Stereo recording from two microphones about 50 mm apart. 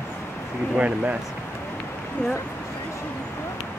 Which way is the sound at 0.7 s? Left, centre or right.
Right.